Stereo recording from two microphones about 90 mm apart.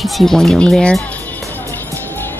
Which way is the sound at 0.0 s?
5° left (ahead or behind).